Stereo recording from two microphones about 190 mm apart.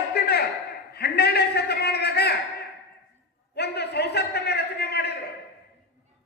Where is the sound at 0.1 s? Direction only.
60° left (ahead or behind).